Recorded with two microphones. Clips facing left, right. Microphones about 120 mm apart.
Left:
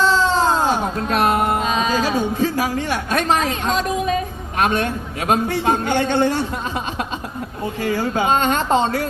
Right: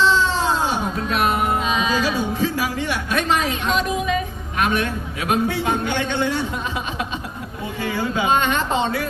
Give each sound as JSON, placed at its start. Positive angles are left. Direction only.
{"t": 0.0, "sound": "a sound", "side_deg": 40}
{"t": 1.0, "sound": "music", "side_deg": 45}
{"t": 7.8, "sound": "speech", "side_deg": 45}